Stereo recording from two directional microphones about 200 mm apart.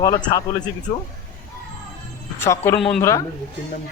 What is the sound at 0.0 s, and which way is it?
Speech, 20° left (ahead or behind).